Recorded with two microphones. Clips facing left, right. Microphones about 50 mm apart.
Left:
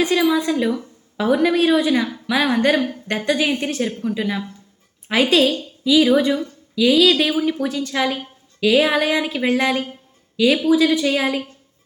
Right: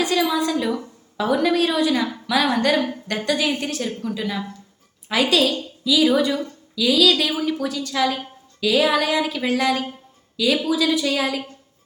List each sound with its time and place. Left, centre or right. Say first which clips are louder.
0.0 s a woman's voice: left 3 dB; centre